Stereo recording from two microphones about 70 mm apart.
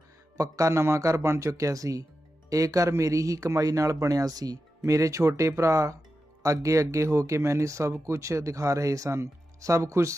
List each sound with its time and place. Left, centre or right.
0.3 s speech: right
4.8 s speech: right